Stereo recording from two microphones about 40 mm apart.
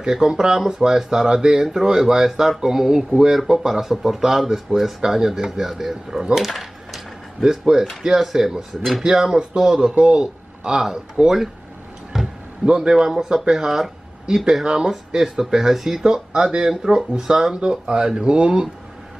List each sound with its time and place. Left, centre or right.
0.0 s speech: centre
6.3 s a sound: centre
7.4 s speech: centre
11.2 s speech: right
12.1 s a sound: centre
12.6 s a man's voice: right
12.9 s speech: centre